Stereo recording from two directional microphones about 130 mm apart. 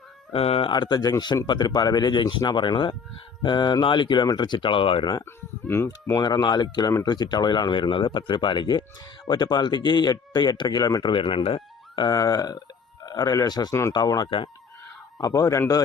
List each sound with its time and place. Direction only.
0.3 s speech: 50° left (ahead or behind)
0.7 s speech: 35° left (ahead or behind)
5.2 s speech: 20° left (ahead or behind)
6.2 s speech: 30° left (ahead or behind)
11.1 s speech: 40° left (ahead or behind)
15.2 s speech: 25° left (ahead or behind)